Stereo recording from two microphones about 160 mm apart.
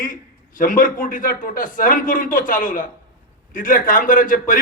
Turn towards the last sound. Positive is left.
turn(degrees=55)  # may be behind; listen again after turning